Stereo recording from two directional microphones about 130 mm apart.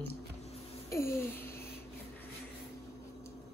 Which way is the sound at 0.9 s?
20° left (ahead or behind).